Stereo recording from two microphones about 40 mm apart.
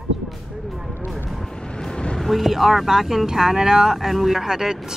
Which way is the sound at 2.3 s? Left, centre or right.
Centre.